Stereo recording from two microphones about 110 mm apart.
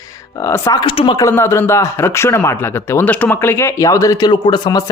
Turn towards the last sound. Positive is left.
turn(degrees=40)  # may be behind; listen again after turning